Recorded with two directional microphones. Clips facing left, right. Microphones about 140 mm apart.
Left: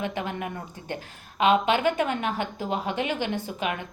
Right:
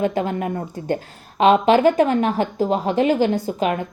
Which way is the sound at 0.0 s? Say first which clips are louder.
Right 9 dB; 40° right (ahead or behind).